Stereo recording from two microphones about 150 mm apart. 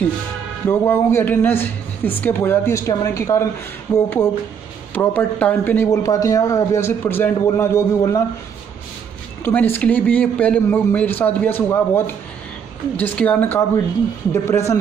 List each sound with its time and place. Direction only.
0.7 s speech: 15° left (ahead or behind)
9.4 s speech: 15° left (ahead or behind)